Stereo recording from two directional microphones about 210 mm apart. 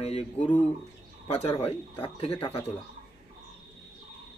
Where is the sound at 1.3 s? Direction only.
30° left (ahead or behind).